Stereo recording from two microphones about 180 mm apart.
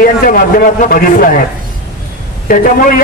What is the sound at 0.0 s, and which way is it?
A man's voice, 55° left (ahead or behind).